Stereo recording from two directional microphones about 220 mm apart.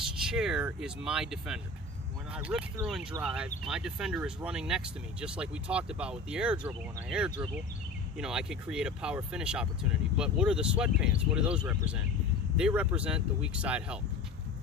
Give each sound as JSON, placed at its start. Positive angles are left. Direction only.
{"t": 0.2, "sound": "speech", "side_deg": 0}